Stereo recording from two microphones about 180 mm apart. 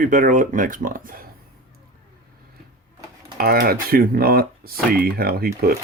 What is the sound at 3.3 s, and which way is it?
Speech, 55° right (ahead or behind).